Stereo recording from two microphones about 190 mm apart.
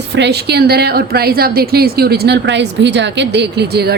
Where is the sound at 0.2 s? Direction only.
60° right (ahead or behind).